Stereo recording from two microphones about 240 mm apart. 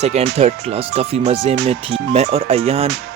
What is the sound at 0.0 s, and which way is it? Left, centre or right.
Speech, right.